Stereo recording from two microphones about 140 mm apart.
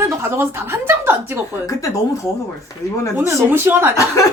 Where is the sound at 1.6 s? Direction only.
25° left (ahead or behind).